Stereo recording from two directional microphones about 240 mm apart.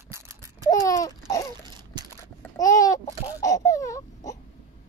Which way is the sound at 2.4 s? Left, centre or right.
Centre.